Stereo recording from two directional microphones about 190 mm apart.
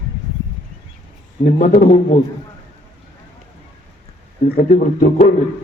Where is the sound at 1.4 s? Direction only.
50° left (ahead or behind).